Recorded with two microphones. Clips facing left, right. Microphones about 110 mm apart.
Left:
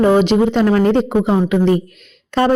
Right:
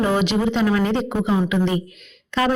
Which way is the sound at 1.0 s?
35° left (ahead or behind).